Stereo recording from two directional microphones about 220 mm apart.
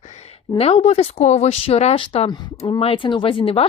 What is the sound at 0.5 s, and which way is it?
A woman's voice, 25° left (ahead or behind).